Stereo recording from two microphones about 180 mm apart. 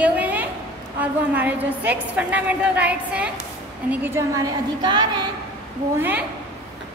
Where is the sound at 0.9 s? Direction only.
10° right (ahead or behind); by 5.2 s 25° right (ahead or behind).